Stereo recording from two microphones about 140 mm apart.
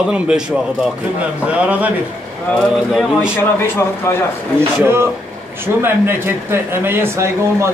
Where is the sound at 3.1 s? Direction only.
15° left (ahead or behind).